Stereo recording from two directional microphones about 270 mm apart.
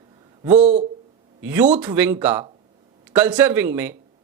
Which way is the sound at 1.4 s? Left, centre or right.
Centre.